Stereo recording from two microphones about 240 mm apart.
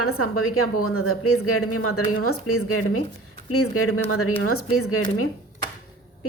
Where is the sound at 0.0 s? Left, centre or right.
Left.